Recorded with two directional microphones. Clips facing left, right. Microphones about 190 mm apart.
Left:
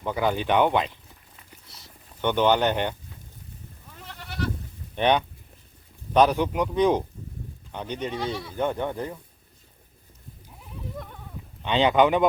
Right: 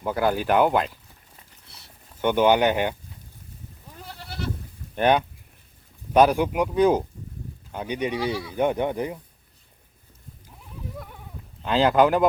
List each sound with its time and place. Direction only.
0.0 s speech: 5° right (ahead or behind)
2.2 s speech: 10° right (ahead or behind)
4.0 s goat: 35° right (ahead or behind)
4.9 s speech: 5° right (ahead or behind)
8.5 s speech: 15° right (ahead or behind)
10.9 s a sound: 5° right (ahead or behind)
11.6 s speech: centre (ahead or behind)